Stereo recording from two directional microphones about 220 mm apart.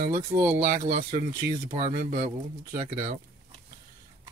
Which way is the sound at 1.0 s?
25° right (ahead or behind).